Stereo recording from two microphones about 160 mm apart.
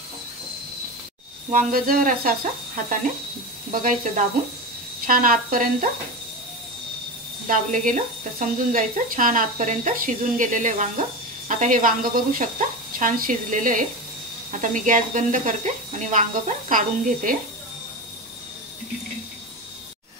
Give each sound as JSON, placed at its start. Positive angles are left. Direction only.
{"t": 1.5, "sound": "speech", "side_deg": -60}
{"t": 5.0, "sound": "speech", "side_deg": -60}
{"t": 7.4, "sound": "speech", "side_deg": -55}